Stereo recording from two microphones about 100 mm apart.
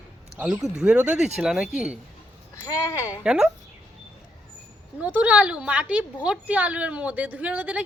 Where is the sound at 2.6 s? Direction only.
25° left (ahead or behind).